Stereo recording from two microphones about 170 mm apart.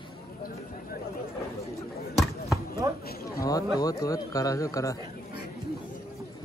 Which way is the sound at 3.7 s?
20° left (ahead or behind).